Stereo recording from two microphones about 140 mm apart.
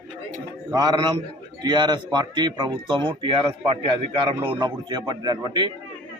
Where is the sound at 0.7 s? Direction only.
30° right (ahead or behind).